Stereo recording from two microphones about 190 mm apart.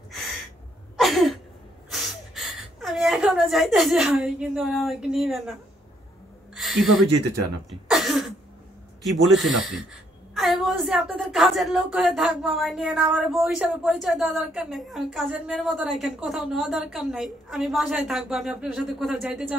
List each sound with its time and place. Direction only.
0.9 s a sound: centre (ahead or behind)
7.9 s cough: centre (ahead or behind)
9.2 s a woman's voice: centre (ahead or behind)